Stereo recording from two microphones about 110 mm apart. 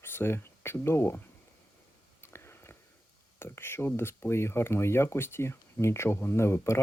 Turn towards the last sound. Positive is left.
turn(degrees=25)  # may be behind; listen again after turning